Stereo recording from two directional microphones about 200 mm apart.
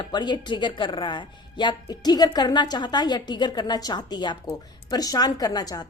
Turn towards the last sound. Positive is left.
turn(degrees=20)  # may be behind; listen again after turning